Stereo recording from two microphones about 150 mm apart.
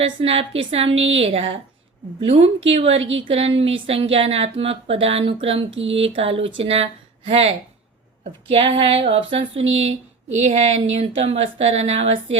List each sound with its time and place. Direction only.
0.0 s a woman's voice: 40° right (ahead or behind)